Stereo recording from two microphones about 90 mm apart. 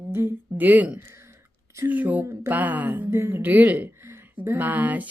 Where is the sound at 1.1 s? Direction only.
30° right (ahead or behind).